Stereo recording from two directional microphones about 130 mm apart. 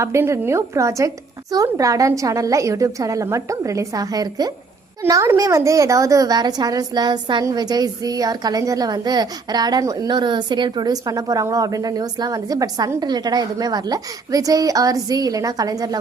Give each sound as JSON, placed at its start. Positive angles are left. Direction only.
{"t": 0.0, "sound": "a woman's voice", "side_deg": -20}